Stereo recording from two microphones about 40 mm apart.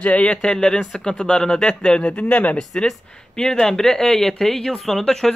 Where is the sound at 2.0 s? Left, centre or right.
Left.